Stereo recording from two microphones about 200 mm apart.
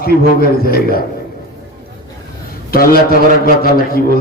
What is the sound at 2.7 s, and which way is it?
A man's voice, 50° left (ahead or behind).